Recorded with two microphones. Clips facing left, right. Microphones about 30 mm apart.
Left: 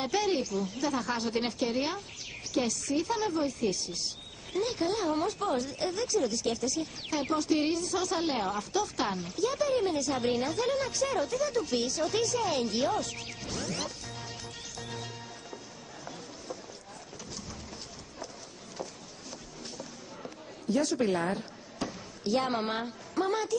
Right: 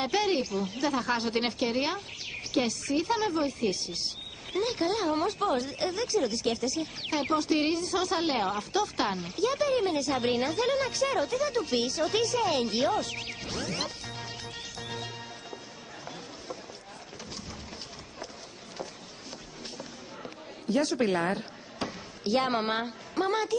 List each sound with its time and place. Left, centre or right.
0.0 s a woman's voice: right
20.7 s speech: right